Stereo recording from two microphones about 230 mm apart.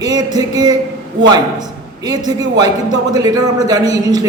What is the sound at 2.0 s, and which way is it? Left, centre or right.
A man's voice, centre.